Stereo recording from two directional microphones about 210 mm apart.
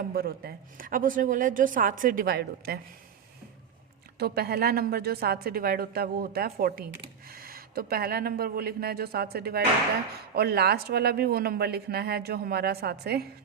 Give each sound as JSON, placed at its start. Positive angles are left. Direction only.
{"t": 0.1, "sound": "a woman's voice", "side_deg": -45}
{"t": 4.2, "sound": "a man's voice", "side_deg": -50}